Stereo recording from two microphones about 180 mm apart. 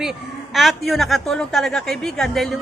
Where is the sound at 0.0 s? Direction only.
Centre (ahead or behind).